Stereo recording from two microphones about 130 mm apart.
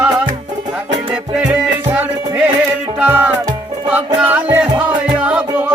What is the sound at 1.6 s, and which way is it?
Music, 10° right (ahead or behind).